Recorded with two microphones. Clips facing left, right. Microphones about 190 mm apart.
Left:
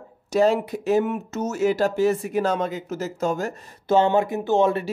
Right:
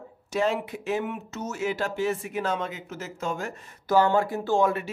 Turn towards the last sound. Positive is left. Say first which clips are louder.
# left 4 dB
turn(degrees=20)  # may be behind; listen again after turning